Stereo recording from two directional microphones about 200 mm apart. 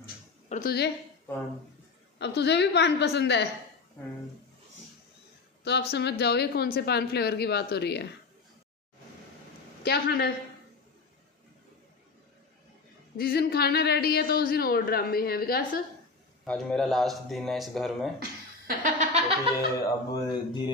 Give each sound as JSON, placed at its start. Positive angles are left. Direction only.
{"t": 0.0, "sound": "a sound", "side_deg": 45}
{"t": 2.1, "sound": "speech", "side_deg": 60}
{"t": 5.6, "sound": "speech", "side_deg": 55}
{"t": 9.8, "sound": "a man's voice", "side_deg": 50}
{"t": 13.2, "sound": "a man's voice", "side_deg": 50}
{"t": 16.4, "sound": "speech", "side_deg": 5}
{"t": 18.7, "sound": "a sound", "side_deg": -40}
{"t": 20.1, "sound": "mantra", "side_deg": 20}